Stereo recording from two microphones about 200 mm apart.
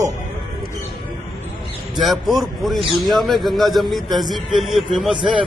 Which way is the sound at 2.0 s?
Centre (ahead or behind).